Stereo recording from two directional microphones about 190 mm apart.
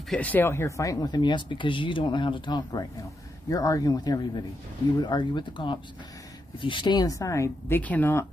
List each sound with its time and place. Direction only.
0.1 s speech: 10° left (ahead or behind)